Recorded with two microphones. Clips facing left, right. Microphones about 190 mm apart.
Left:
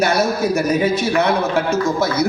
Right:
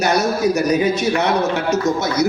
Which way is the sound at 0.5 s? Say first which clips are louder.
Even; 55° left (ahead or behind).